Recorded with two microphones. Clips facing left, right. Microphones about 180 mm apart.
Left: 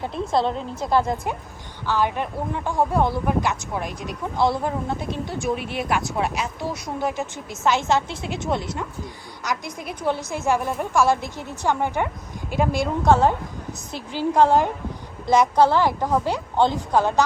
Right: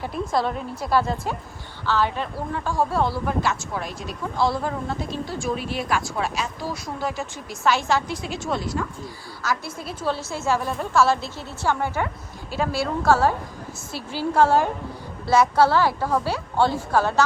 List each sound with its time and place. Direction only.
0.0 s a woman's voice: 25° left (ahead or behind)